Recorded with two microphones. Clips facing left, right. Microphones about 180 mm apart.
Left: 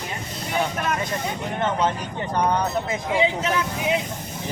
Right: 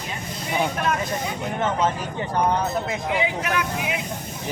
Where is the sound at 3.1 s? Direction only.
25° left (ahead or behind).